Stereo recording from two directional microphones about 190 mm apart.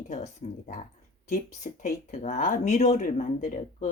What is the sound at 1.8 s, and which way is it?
Speech, 40° left (ahead or behind).